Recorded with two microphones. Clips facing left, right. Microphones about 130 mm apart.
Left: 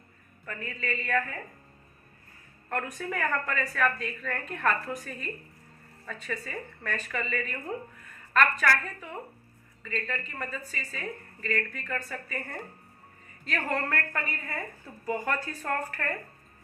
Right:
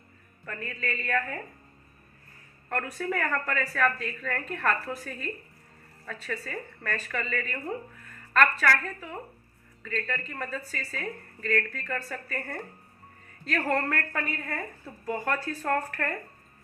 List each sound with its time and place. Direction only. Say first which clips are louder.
0.4 s a woman's voice: right 1 dB; centre (ahead or behind)
2.6 s a woman's voice: right 2 dB; 5° left (ahead or behind)